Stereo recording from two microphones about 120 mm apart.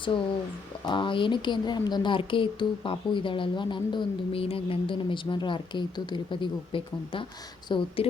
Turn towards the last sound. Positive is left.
turn(degrees=40)  # may be behind; listen again after turning